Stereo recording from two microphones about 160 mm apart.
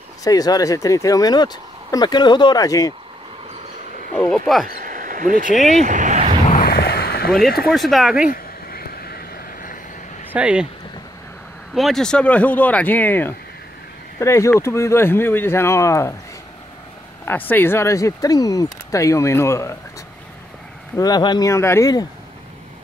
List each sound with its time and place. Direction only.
0.2 s speech: 20° left (ahead or behind)
4.3 s speech: centre (ahead or behind)
4.6 s a sound: 55° right (ahead or behind)
6.5 s a sound: 65° left (ahead or behind)
7.7 s speech: centre (ahead or behind)
8.3 s a sound: 70° left (ahead or behind)
10.3 s speech: 5° right (ahead or behind)
11.7 s speech: centre (ahead or behind); by 16.2 s 20° left (ahead or behind)
17.2 s speech: 10° left (ahead or behind)
20.9 s speech: 25° left (ahead or behind)